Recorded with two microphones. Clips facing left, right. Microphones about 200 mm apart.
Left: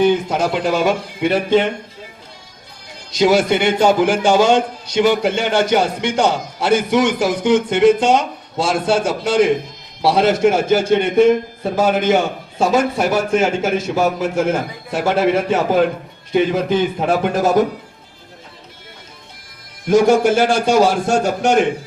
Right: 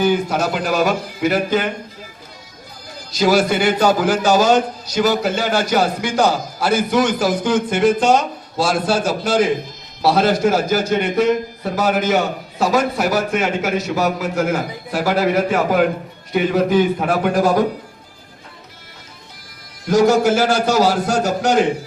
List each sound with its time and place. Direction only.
0.0 s a man's voice: 25° left (ahead or behind)
3.1 s a man's voice: 25° left (ahead or behind)
19.9 s a man's voice: 25° left (ahead or behind)